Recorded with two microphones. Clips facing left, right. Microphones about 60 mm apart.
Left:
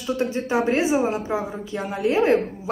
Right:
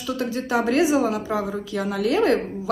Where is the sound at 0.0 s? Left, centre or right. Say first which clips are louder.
Left 2 dB; left.